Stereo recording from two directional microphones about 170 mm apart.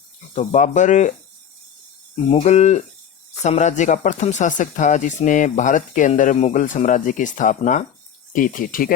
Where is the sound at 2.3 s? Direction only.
40° left (ahead or behind).